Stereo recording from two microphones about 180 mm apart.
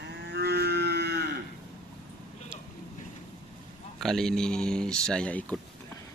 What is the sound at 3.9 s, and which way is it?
Speech, centre (ahead or behind).